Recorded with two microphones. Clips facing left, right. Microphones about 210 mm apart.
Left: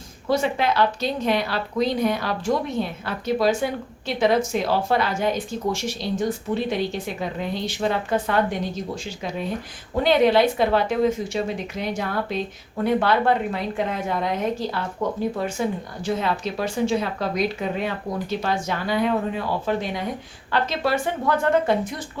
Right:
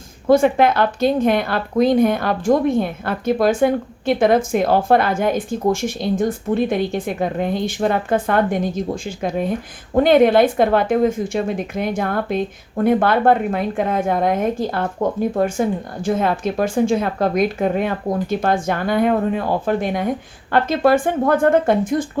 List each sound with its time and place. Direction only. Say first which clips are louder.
0.3 s a woman's voice: right 8 dB; 50° right (ahead or behind)